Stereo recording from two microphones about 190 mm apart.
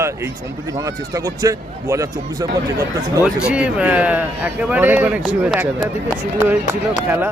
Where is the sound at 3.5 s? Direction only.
5° right (ahead or behind).